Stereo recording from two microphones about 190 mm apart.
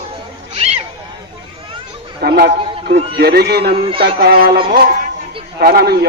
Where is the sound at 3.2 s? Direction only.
55° right (ahead or behind).